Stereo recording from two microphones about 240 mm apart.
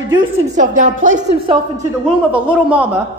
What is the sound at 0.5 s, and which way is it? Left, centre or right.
Speech, right.